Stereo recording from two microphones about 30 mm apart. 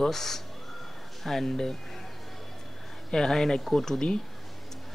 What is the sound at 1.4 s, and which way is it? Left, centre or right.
Speech, centre.